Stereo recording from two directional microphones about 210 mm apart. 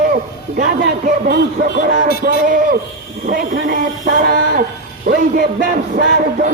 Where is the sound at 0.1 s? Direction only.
40° right (ahead or behind).